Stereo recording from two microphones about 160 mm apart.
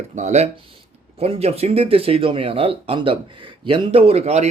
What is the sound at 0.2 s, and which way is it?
Speech, 45° right (ahead or behind).